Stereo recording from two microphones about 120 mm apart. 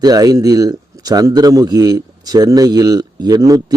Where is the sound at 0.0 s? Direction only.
30° right (ahead or behind).